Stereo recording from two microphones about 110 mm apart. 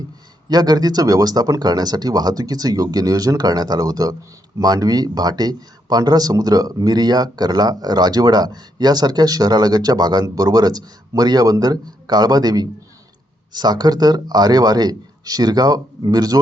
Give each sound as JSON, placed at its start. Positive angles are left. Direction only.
{"t": 0.4, "sound": "speech", "side_deg": -40}